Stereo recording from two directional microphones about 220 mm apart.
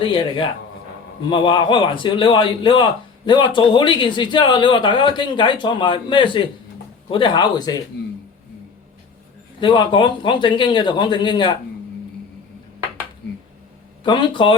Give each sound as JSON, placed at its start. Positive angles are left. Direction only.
{"t": 0.0, "sound": "a man's voice", "side_deg": 20}
{"t": 9.6, "sound": "a man's voice", "side_deg": 20}
{"t": 14.0, "sound": "a man's voice", "side_deg": 20}